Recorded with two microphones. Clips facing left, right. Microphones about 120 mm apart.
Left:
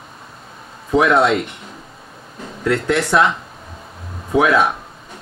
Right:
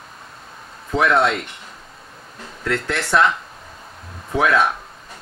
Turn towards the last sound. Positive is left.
turn(degrees=5)  # may be behind; listen again after turning